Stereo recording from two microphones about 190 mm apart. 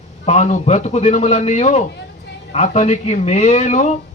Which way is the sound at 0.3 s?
40° left (ahead or behind).